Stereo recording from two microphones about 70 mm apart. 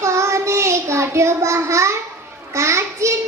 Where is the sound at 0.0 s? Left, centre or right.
Right.